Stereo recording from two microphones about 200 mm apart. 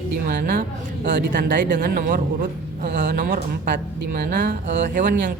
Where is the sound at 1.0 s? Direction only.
60° right (ahead or behind).